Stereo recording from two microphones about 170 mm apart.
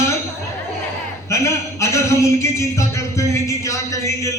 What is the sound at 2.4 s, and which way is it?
A man's voice, 15° left (ahead or behind).